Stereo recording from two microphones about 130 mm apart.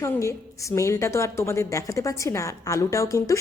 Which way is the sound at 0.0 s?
25° left (ahead or behind).